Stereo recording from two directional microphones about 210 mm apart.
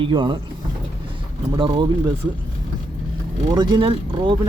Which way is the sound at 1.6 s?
20° right (ahead or behind).